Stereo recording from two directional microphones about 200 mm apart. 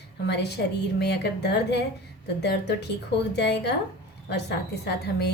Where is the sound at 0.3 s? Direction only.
55° left (ahead or behind).